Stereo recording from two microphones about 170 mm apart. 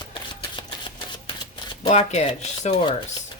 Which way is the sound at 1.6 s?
25° left (ahead or behind).